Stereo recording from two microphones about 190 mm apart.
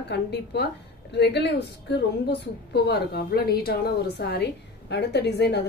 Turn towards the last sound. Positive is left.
turn(degrees=60)  # may be behind; listen again after turning